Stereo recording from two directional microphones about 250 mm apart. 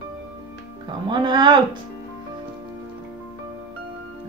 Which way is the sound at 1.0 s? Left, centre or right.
Centre.